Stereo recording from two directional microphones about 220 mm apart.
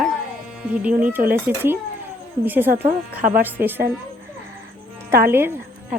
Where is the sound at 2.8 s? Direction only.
35° right (ahead or behind).